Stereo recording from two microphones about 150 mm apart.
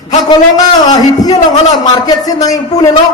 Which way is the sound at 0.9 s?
25° left (ahead or behind).